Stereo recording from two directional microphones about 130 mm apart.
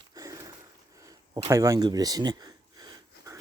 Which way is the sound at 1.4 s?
25° right (ahead or behind).